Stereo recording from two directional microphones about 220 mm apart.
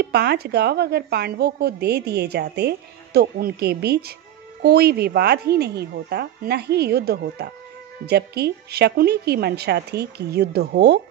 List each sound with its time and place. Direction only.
0.0 s a woman's voice: 45° right (ahead or behind)